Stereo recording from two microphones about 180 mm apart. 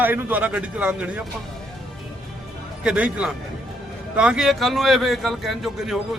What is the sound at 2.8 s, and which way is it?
A man's voice, 5° right (ahead or behind).